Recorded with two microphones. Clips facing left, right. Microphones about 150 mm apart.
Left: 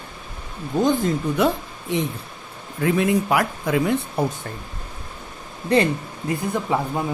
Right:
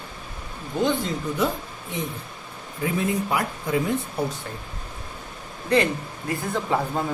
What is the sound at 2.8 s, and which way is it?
Speech, 80° left.